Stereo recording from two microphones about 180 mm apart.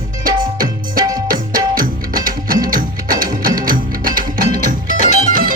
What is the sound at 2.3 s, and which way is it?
Music, 50° right (ahead or behind).